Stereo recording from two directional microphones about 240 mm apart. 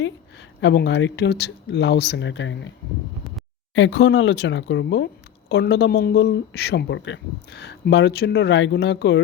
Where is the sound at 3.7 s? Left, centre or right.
Left.